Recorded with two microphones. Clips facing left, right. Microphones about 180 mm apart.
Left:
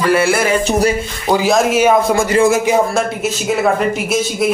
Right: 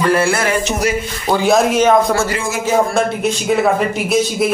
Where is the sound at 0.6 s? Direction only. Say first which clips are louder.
Left 4 dB; 35° left (ahead or behind).